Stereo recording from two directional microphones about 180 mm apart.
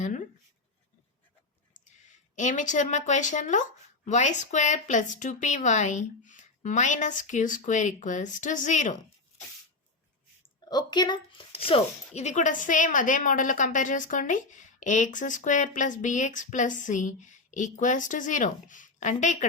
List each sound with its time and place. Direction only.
0.0 s a sound: 45° left (ahead or behind)
2.3 s speech: 40° left (ahead or behind)
10.7 s speech: 25° left (ahead or behind); by 19.5 s 40° left (ahead or behind)